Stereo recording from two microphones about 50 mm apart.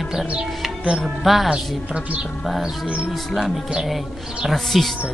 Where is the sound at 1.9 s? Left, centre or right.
Right.